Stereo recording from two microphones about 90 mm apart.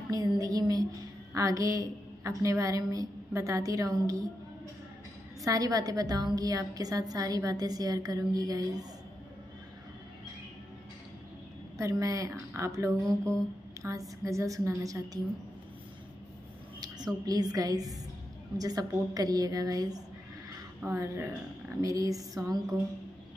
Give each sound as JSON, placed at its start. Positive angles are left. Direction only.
{"t": 0.1, "sound": "a woman's voice", "side_deg": -45}
{"t": 5.4, "sound": "a woman's voice", "side_deg": -40}
{"t": 11.8, "sound": "a woman's voice", "side_deg": -40}
{"t": 16.8, "sound": "a woman's voice", "side_deg": -45}
{"t": 21.0, "sound": "a woman's voice", "side_deg": -30}